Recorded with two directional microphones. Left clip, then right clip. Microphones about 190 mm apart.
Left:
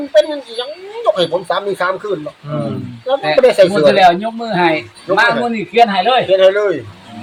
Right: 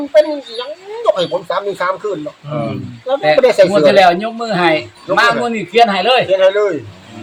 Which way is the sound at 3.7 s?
30° right (ahead or behind).